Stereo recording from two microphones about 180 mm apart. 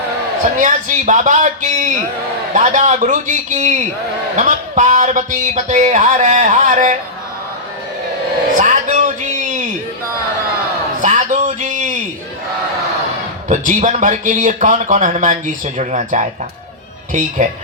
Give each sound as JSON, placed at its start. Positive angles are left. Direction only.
{"t": 0.6, "sound": "speech", "side_deg": -45}
{"t": 8.5, "sound": "music", "side_deg": -45}
{"t": 11.0, "sound": "a sound", "side_deg": -45}
{"t": 13.5, "sound": "speech", "side_deg": -45}